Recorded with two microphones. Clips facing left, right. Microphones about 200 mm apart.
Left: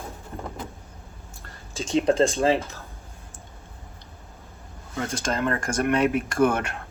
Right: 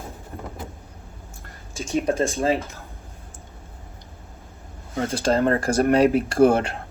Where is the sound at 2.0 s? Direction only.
30° left (ahead or behind).